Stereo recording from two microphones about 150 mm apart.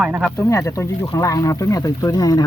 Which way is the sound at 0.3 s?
20° left (ahead or behind).